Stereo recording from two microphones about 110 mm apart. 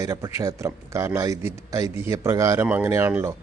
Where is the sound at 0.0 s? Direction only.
35° right (ahead or behind).